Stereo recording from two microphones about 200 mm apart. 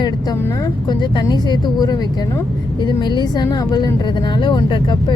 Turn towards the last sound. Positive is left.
turn(degrees=25)  # may be behind; listen again after turning